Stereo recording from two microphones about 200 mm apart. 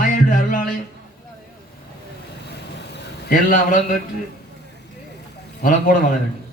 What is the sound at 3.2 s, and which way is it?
Speech, 45° left (ahead or behind).